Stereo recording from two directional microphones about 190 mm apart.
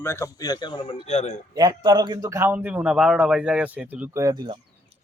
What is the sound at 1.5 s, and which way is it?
A man's voice, 20° right (ahead or behind).